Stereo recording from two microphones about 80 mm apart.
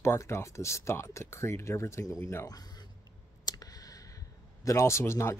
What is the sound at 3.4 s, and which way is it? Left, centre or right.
Clicking, left.